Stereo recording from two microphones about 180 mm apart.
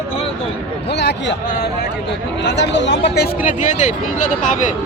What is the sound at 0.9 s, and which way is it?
A man's voice, 70° left (ahead or behind).